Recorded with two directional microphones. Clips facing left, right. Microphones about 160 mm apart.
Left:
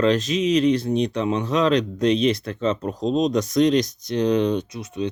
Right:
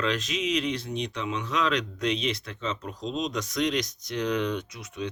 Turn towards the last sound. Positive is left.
turn(degrees=30)  # may be behind; listen again after turning